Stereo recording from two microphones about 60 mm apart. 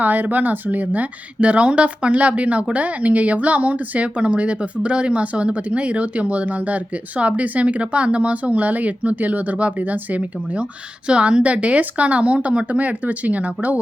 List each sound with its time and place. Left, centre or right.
0.0 s a woman's voice: right